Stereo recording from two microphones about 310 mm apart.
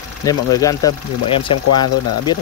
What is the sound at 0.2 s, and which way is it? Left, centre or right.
Speech, centre.